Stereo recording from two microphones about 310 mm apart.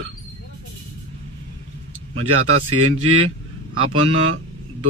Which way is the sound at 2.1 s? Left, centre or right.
Right.